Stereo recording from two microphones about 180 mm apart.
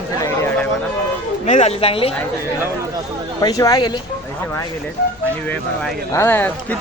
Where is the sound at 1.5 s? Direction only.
40° left (ahead or behind).